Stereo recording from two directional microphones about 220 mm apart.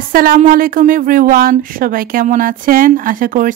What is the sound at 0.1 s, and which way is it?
A woman's voice, 40° right (ahead or behind).